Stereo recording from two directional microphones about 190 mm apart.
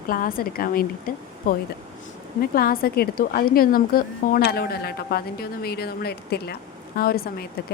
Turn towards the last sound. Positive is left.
turn(degrees=55)  # may be behind; listen again after turning